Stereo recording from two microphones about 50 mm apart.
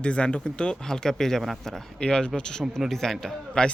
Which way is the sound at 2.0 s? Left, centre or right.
Centre.